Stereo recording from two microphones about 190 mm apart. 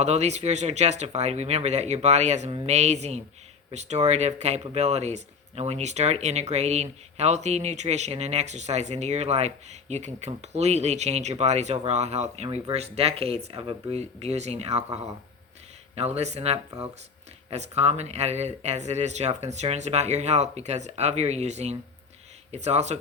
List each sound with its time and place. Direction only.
0.0 s speech: 35° right (ahead or behind)
16.0 s speech: 35° right (ahead or behind)